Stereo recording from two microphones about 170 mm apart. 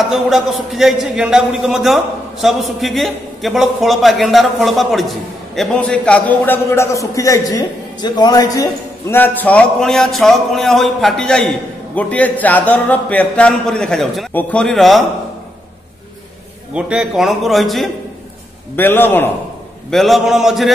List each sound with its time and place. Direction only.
0.0 s a man's voice: centre (ahead or behind); by 8.6 s 20° left (ahead or behind)
9.1 s speech: 10° left (ahead or behind)
16.7 s speech: 5° right (ahead or behind)
18.8 s a man's voice: 10° left (ahead or behind)
19.9 s speech: centre (ahead or behind)